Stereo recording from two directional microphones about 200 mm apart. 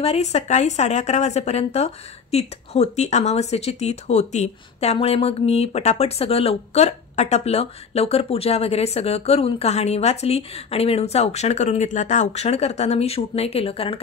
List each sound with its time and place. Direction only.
0.0 s a woman's voice: 30° left (ahead or behind)